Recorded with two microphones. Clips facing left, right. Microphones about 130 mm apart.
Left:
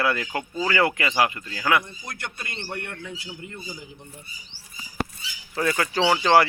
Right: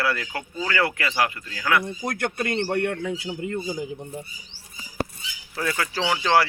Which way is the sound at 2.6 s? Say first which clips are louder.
Right 10 dB; 80° right.